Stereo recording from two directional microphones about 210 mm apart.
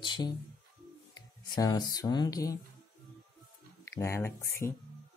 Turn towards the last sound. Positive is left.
turn(degrees=10)  # may be behind; listen again after turning